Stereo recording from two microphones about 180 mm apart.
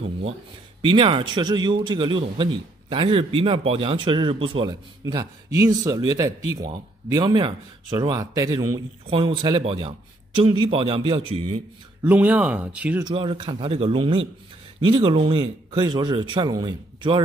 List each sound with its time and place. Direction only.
0.8 s a man's voice: 30° right (ahead or behind)
12.0 s speech: 10° right (ahead or behind)
13.0 s a man's voice: 30° right (ahead or behind)